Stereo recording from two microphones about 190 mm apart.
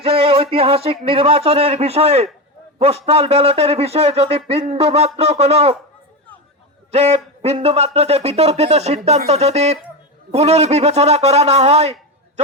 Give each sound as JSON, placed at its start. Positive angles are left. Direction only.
{"t": 0.0, "sound": "music", "side_deg": -30}
{"t": 1.0, "sound": "a man's voice", "side_deg": -30}
{"t": 6.9, "sound": "speech", "side_deg": -35}